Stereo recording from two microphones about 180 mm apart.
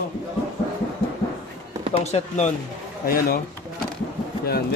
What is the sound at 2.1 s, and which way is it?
Speech, 40° left (ahead or behind).